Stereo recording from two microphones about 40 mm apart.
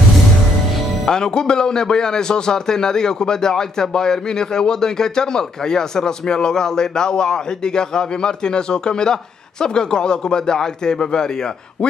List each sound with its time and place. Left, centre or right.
1.0 s a man's voice: centre